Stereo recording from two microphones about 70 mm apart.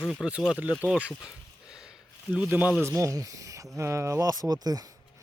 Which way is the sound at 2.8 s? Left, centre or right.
Right.